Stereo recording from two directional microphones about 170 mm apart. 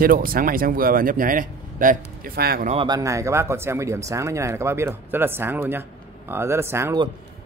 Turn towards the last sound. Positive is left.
turn(degrees=-15)  # may be behind; listen again after turning